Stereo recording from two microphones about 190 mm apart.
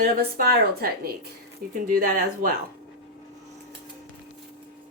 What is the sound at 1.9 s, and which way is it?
Speech, 50° right (ahead or behind).